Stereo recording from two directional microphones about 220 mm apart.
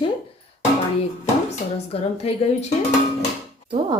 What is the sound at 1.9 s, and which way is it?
Speech, 25° left (ahead or behind).